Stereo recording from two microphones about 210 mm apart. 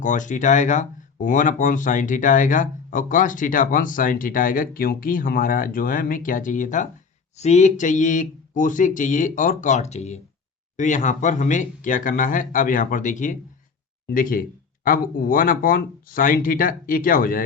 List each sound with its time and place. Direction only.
0.0 s speech: 35° left (ahead or behind)